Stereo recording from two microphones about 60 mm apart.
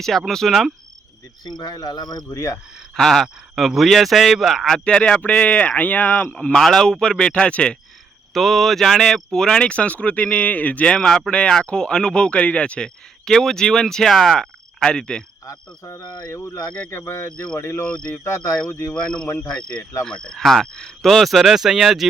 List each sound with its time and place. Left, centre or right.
0.0 s speech: centre
1.7 s speech: left
2.9 s speech: centre; by 6.3 s left
6.3 s speech: centre
8.3 s speech: centre; by 10.9 s left
10.9 s speech: centre
13.2 s speech: centre
14.3 s cricket: centre
15.4 s speech: left
16.3 s speech: left
20.1 s speech: centre